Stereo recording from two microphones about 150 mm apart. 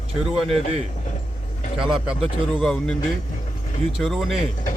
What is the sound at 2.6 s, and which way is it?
Speech, 5° left (ahead or behind).